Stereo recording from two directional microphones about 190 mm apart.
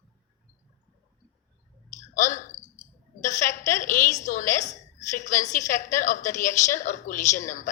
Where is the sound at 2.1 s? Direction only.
40° left (ahead or behind).